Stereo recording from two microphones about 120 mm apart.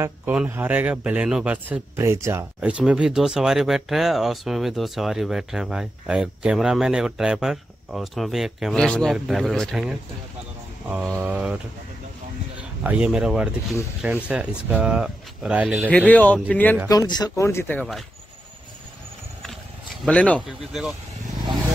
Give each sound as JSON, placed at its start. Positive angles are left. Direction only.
{"t": 0.0, "sound": "speech", "side_deg": -15}
{"t": 2.0, "sound": "speech", "side_deg": -20}
{"t": 2.6, "sound": "speech", "side_deg": -10}
{"t": 11.1, "sound": "speech", "side_deg": -10}
{"t": 12.8, "sound": "speech", "side_deg": -10}
{"t": 15.9, "sound": "speech", "side_deg": 10}
{"t": 16.9, "sound": "speech", "side_deg": 35}
{"t": 17.5, "sound": "speech", "side_deg": 20}
{"t": 20.1, "sound": "speech", "side_deg": 10}
{"t": 20.4, "sound": "speech", "side_deg": -5}